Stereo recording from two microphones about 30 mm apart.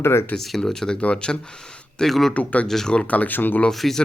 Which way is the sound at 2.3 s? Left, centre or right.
Left.